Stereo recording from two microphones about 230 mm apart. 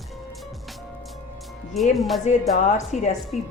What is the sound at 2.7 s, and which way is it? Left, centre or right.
Speech, left.